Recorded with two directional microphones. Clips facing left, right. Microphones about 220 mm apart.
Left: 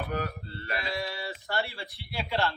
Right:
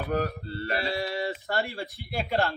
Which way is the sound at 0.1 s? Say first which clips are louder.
Right 5 dB; 35° right (ahead or behind).